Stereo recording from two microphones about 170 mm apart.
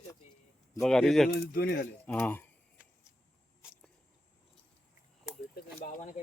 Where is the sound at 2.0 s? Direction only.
10° left (ahead or behind).